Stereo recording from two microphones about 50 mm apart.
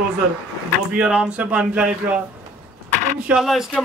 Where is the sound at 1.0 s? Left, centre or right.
Centre.